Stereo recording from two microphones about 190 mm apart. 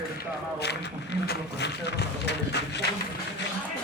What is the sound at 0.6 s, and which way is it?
Speech, 60° left (ahead or behind).